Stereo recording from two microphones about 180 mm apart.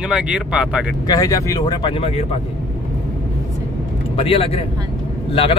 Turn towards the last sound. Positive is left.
turn(degrees=30)  # may be behind; listen again after turning